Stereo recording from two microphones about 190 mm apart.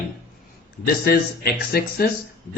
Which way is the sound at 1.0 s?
55° left (ahead or behind).